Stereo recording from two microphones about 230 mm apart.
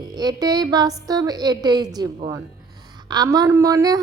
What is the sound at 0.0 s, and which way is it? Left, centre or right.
A woman's voice, centre.